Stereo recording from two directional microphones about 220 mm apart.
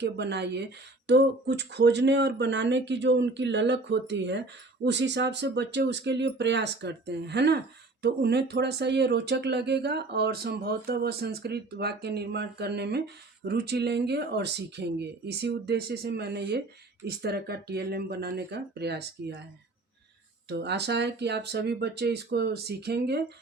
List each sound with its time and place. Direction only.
0.0 s speech: 50° right (ahead or behind)
20.5 s speech: 50° right (ahead or behind)